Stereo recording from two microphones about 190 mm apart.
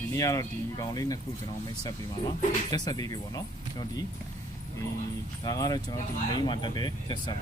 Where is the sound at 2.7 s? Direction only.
20° left (ahead or behind).